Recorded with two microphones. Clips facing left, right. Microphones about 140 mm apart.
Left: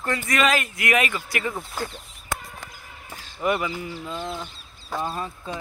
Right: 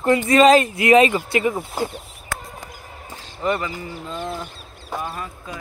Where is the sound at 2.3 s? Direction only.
20° left (ahead or behind).